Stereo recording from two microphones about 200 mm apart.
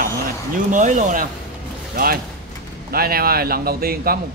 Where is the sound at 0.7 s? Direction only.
40° right (ahead or behind).